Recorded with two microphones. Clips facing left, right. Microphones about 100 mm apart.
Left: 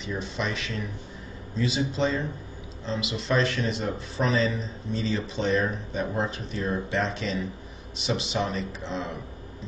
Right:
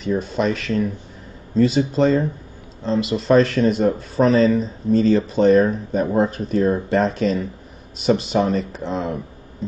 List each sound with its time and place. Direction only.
0.0 s speech: 45° right (ahead or behind)